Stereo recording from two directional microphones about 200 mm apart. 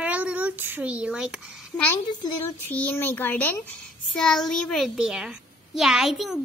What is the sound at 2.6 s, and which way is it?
A child's voice, 10° left (ahead or behind).